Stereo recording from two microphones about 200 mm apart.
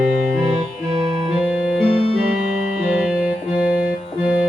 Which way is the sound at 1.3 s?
5° right (ahead or behind).